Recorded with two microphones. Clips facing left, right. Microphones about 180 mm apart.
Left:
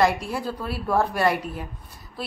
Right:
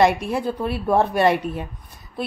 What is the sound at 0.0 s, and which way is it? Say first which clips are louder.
A woman's voice: right 4 dB; 20° right (ahead or behind).